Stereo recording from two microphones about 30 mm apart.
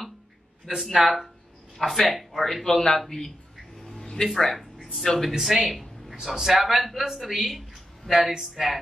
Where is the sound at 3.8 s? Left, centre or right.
Centre.